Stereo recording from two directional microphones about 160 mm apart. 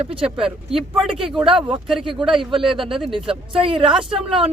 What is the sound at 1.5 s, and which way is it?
Speech, 30° right (ahead or behind).